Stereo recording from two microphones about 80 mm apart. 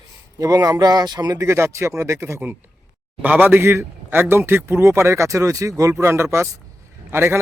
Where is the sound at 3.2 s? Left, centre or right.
Right.